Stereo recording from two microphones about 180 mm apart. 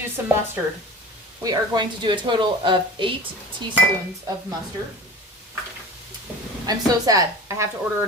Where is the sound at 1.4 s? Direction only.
20° right (ahead or behind).